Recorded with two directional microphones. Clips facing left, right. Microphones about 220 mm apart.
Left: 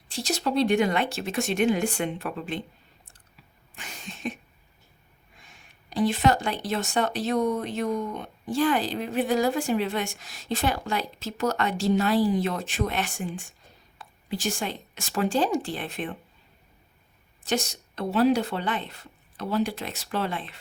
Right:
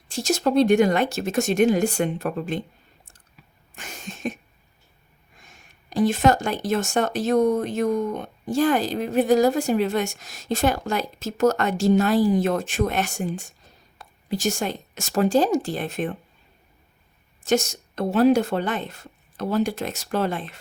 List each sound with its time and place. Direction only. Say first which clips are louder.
0.1 s speech: right 6 dB; 45° right (ahead or behind)
3.8 s cough: right 4 dB; 45° right (ahead or behind)
5.4 s speech: right 3 dB; 45° right (ahead or behind)
17.4 s speech: right 6 dB; 45° right (ahead or behind)